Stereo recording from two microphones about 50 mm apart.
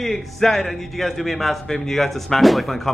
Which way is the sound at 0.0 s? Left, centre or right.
Centre.